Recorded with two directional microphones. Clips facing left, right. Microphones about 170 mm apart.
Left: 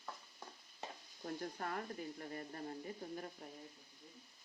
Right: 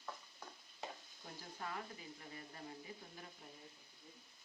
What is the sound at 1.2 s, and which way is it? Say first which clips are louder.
Speech: left 6 dB; 50° left (ahead or behind).